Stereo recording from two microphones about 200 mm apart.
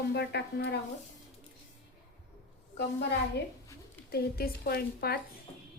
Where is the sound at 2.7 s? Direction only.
60° left (ahead or behind).